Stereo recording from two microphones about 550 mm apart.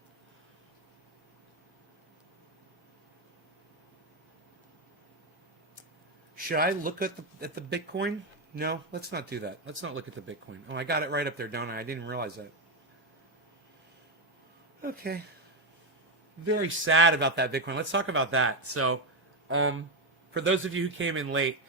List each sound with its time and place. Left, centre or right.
6.3 s speech: centre
14.8 s speech: centre
16.5 s speech: right